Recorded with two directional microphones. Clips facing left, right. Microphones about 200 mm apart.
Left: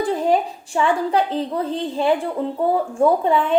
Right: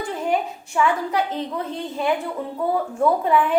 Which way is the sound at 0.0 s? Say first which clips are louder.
Left 5 dB; 35° left (ahead or behind).